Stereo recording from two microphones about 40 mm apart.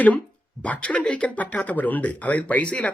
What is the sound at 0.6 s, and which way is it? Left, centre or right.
Speech, left.